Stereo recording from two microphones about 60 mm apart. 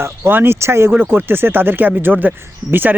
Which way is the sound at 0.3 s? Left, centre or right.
Right.